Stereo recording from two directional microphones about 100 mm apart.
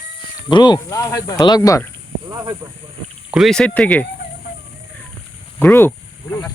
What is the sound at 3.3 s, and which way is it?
Speech, 5° left (ahead or behind).